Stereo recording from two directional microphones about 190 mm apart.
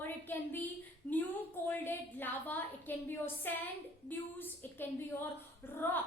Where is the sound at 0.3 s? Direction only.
10° left (ahead or behind).